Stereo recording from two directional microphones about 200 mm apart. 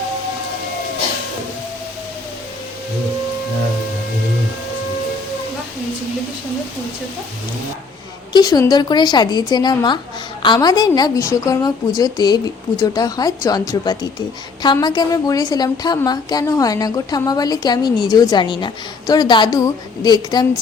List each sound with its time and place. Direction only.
8.3 s a woman's voice: 20° left (ahead or behind)